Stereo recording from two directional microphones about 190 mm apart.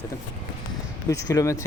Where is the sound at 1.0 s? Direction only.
15° left (ahead or behind).